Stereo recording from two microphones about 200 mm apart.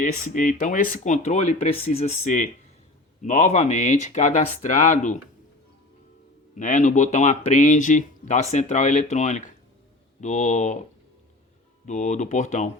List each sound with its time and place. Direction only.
0.0 s speech: 40° left (ahead or behind)
6.6 s speech: 40° left (ahead or behind)
11.9 s speech: 40° left (ahead or behind)